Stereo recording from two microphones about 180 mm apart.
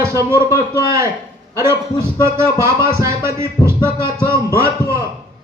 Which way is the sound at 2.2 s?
15° right (ahead or behind).